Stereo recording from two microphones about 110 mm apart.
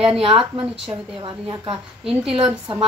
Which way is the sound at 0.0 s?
55° right (ahead or behind).